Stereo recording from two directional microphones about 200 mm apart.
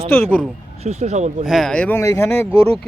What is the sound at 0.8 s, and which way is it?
Speech, 30° right (ahead or behind).